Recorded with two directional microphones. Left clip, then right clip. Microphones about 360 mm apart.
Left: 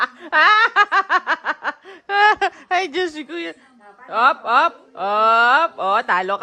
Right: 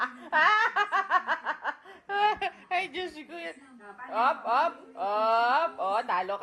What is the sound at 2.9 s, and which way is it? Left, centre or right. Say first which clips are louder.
Speech: left 13 dB; left.